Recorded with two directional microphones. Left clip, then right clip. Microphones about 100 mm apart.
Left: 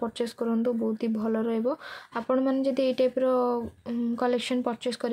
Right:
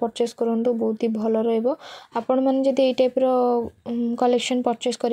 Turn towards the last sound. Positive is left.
turn(degrees=-40)  # may be behind; listen again after turning